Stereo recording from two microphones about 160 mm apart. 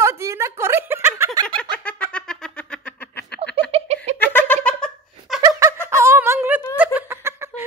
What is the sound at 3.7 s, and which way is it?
Giggle, 40° right (ahead or behind).